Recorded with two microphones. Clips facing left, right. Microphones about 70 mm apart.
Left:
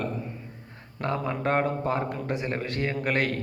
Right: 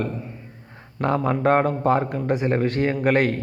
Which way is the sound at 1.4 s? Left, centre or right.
Right.